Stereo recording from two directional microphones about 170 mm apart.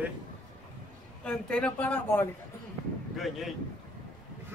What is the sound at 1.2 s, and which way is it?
Speech, 5° left (ahead or behind).